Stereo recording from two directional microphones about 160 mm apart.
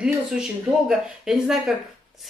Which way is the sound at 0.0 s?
5° right (ahead or behind).